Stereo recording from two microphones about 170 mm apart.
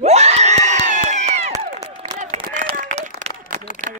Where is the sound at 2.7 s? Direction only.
45° right (ahead or behind).